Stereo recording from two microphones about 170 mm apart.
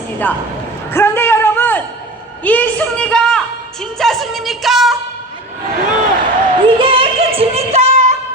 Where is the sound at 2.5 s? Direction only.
10° left (ahead or behind).